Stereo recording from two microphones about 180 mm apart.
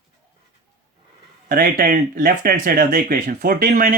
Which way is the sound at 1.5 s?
55° right (ahead or behind).